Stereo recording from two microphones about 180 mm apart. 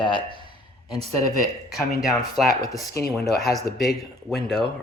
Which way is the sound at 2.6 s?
20° left (ahead or behind).